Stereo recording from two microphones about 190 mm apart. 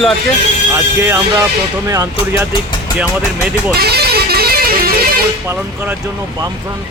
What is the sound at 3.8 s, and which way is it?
Music, 55° right (ahead or behind).